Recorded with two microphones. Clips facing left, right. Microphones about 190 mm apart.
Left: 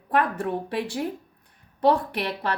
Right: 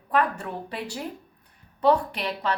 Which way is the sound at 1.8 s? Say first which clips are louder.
Even; 60° left (ahead or behind).